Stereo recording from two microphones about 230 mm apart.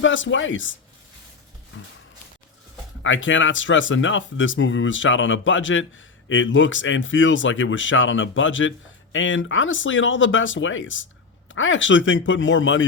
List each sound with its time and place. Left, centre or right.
0.0 s speech: left
3.0 s speech: left